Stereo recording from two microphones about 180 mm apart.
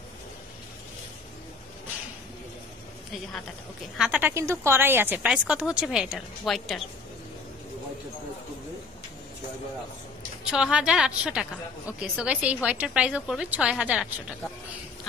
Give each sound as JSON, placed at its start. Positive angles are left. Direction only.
{"t": 4.0, "sound": "a woman's voice", "side_deg": -10}
{"t": 10.4, "sound": "a woman's voice", "side_deg": -5}